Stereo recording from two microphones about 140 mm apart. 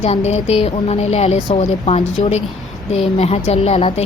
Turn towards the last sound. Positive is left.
turn(degrees=50)  # may be behind; listen again after turning